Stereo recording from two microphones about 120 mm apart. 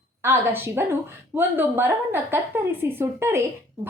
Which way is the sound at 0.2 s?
20° right (ahead or behind).